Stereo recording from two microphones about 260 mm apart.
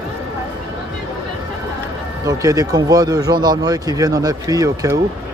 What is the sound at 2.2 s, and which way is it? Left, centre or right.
Speech, centre.